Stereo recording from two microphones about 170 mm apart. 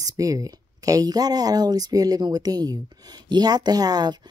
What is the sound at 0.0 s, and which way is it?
Speech, 20° right (ahead or behind).